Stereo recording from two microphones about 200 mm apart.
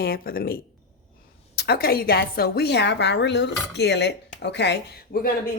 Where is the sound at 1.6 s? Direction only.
50° left (ahead or behind).